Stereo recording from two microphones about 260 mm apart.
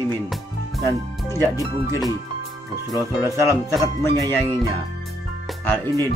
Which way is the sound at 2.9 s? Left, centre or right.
Centre.